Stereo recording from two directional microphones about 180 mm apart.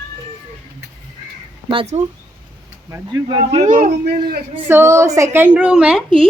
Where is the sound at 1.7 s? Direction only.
35° right (ahead or behind).